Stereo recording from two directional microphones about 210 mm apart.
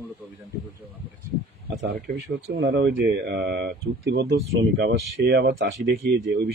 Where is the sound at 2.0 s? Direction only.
55° right (ahead or behind).